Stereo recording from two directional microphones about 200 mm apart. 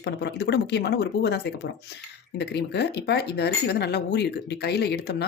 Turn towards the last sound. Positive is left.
turn(degrees=55)  # may be behind; listen again after turning